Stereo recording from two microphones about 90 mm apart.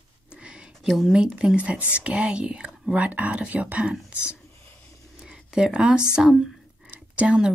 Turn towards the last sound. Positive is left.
turn(degrees=-15)  # may be behind; listen again after turning